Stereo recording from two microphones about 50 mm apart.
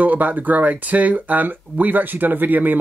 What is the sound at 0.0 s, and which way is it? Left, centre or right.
Speech, right.